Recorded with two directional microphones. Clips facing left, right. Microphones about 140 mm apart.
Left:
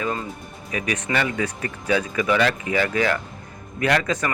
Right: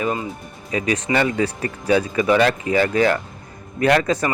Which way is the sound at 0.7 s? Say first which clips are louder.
Right 5 dB; 30° right (ahead or behind).